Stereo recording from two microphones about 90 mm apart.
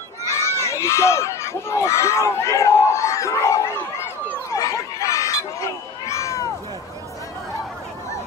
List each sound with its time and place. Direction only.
0.4 s speech: 30° left (ahead or behind)
4.5 s crowd: 35° left (ahead or behind)